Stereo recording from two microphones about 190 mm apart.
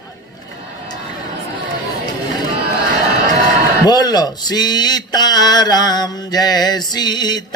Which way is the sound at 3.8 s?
20° left (ahead or behind).